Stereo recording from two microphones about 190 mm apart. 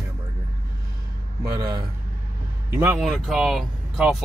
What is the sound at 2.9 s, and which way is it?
Speech, centre (ahead or behind).